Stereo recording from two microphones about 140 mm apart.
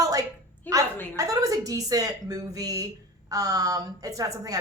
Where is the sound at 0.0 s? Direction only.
25° right (ahead or behind).